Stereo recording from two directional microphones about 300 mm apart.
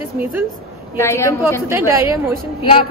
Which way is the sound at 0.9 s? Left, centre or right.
Centre.